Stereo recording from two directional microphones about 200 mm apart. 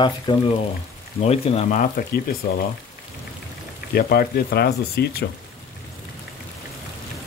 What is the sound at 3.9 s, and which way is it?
Speech, 50° left (ahead or behind).